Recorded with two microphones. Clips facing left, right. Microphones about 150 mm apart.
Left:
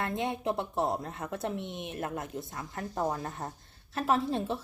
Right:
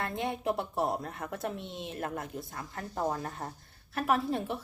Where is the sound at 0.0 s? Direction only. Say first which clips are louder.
Left 1 dB; 20° left (ahead or behind).